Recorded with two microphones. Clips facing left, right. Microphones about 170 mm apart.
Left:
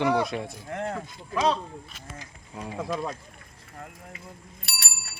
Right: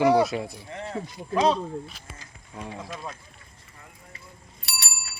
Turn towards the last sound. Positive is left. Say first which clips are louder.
# right 3 dB
turn(degrees=55)  # may be behind; listen again after turning